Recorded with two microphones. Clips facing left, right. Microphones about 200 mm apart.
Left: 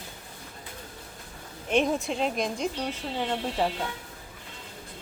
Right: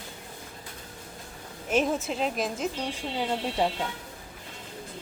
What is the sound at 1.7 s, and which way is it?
A woman's voice, centre (ahead or behind).